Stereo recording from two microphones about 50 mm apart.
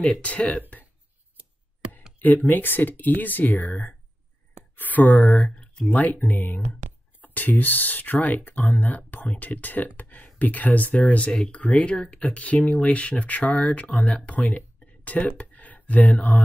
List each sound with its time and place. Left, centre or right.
0.2 s speech: left
2.1 s speech: left